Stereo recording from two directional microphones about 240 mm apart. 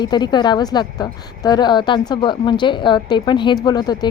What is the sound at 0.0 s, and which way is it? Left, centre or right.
Speech, centre.